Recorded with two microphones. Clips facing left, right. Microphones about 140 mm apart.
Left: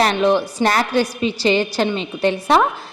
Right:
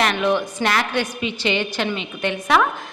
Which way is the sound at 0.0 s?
35° left (ahead or behind).